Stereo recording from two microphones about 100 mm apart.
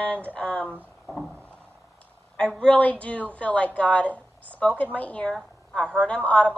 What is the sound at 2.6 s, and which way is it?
A woman's voice, 10° left (ahead or behind).